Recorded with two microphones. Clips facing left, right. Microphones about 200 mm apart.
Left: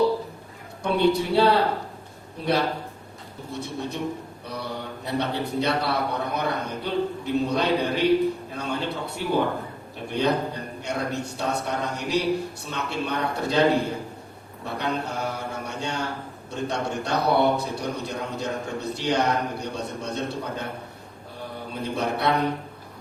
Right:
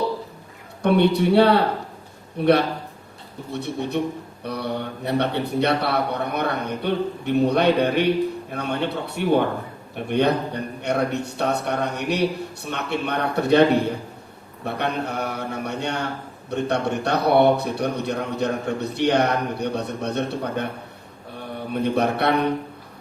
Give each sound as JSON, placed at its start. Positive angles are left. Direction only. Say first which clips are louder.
{"t": 0.8, "sound": "a man's voice", "louder": "right 4 dB", "side_deg": -60}
{"t": 21.7, "sound": "a man's voice", "louder": "right 6 dB", "side_deg": -65}